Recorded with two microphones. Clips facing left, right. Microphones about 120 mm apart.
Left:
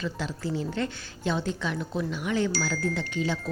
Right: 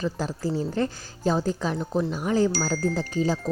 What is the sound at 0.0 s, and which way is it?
A woman's voice, 40° right (ahead or behind).